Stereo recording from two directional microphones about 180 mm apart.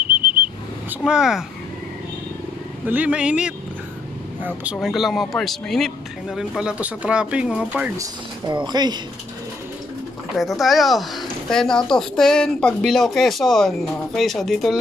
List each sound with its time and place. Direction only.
0.4 s vehicle: 10° right (ahead or behind)
2.9 s speech: 5° right (ahead or behind)
8.0 s speech: 25° right (ahead or behind)
10.3 s speech: centre (ahead or behind)